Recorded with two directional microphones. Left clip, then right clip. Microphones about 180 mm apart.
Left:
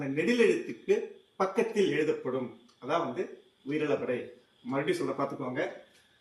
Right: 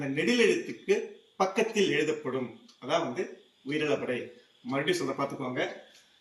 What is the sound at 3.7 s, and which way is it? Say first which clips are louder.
A man's voice: right 1 dB; 15° left (ahead or behind).